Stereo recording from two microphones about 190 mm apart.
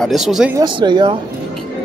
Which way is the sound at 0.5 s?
25° right (ahead or behind).